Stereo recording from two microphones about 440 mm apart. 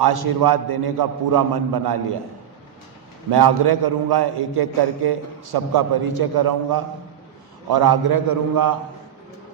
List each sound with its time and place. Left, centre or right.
0.0 s a man's voice: right
3.2 s a man's voice: right